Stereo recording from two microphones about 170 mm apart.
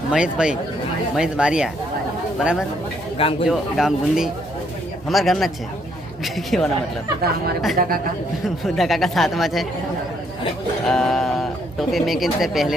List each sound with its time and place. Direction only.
0.1 s speech: 5° right (ahead or behind)
3.2 s speech: 35° left (ahead or behind)
3.5 s speech: centre (ahead or behind)
7.8 s a man's voice: 55° right (ahead or behind)
8.4 s speech: centre (ahead or behind)
10.8 s speech: centre (ahead or behind)